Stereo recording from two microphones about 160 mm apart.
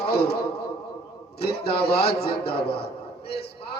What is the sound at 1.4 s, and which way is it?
A man's voice, 90° left.